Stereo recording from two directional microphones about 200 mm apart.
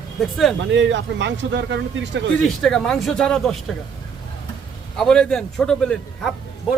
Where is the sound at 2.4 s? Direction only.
Centre (ahead or behind).